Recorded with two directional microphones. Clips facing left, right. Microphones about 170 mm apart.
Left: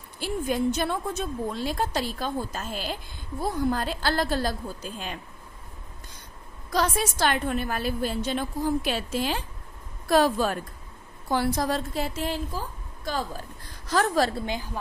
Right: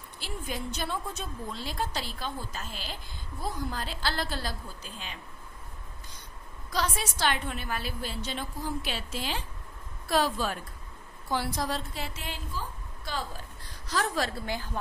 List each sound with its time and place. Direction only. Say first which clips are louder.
0.2 s a woman's voice: left 11 dB; 50° left (ahead or behind)
6.7 s a woman's voice: left 6 dB; 50° left (ahead or behind)
14.4 s a woman's voice: left 3 dB; 20° left (ahead or behind)